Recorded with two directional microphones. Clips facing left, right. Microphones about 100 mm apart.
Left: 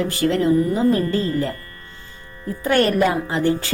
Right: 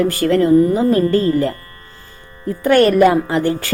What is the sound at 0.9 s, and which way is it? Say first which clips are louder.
Speech: right 6 dB; 60° right (ahead or behind).